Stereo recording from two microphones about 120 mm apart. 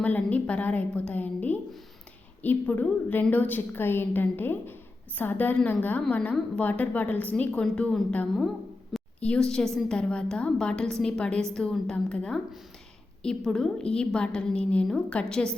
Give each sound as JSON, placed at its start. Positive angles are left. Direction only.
{"t": 0.0, "sound": "a woman's voice", "side_deg": 10}